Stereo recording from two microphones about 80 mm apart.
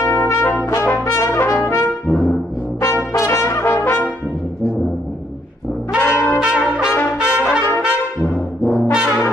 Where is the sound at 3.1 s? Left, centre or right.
Left.